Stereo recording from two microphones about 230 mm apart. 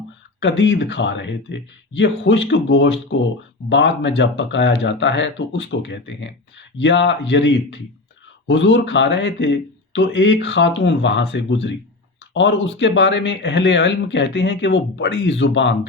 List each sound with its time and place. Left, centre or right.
0.3 s speech: left